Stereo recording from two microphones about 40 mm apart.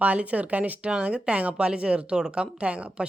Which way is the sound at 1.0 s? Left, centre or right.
Right.